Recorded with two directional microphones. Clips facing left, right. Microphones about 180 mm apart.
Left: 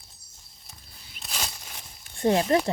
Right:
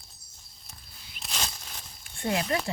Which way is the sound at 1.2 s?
5° left (ahead or behind).